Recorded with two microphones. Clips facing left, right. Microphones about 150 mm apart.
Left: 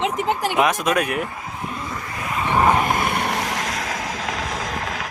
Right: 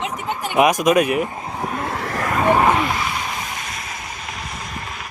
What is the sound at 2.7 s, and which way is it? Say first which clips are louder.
Vehicle: left 1 dB; 50° left (ahead or behind).